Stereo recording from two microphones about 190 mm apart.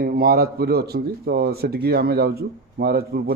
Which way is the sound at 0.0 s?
50° right (ahead or behind).